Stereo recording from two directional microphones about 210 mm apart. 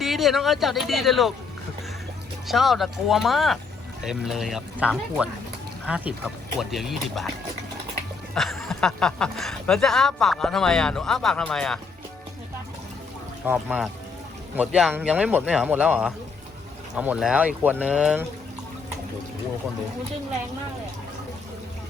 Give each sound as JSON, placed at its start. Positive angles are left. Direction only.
{"t": 0.0, "sound": "speech", "side_deg": 0}
{"t": 2.5, "sound": "speech", "side_deg": 0}
{"t": 8.4, "sound": "speech", "side_deg": 0}
{"t": 13.4, "sound": "speech", "side_deg": -10}